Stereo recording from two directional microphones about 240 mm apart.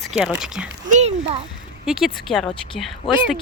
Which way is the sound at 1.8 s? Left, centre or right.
Centre.